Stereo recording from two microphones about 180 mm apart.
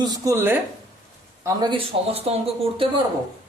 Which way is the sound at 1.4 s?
25° right (ahead or behind).